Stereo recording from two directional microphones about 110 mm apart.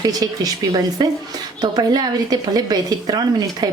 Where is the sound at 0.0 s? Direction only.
35° right (ahead or behind).